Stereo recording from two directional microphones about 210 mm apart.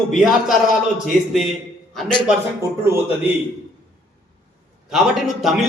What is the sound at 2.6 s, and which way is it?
Speech, 10° right (ahead or behind).